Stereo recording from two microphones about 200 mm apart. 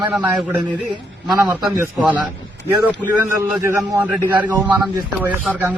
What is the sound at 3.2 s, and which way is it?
Speech, 10° right (ahead or behind).